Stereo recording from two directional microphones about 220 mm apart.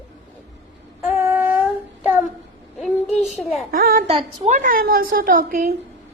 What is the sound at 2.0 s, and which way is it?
Child singing, 5° right (ahead or behind).